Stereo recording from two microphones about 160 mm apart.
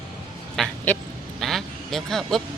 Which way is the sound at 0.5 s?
Centre (ahead or behind).